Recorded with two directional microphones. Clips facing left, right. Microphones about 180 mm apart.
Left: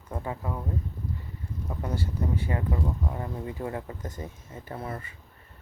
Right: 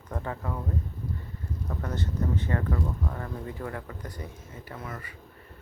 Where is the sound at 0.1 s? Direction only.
15° left (ahead or behind).